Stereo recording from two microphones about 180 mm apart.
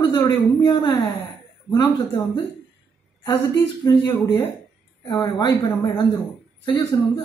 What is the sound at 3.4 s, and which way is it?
A woman's voice, 15° left (ahead or behind).